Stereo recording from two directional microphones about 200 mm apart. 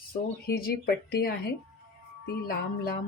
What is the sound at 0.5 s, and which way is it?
Speech, 50° left (ahead or behind).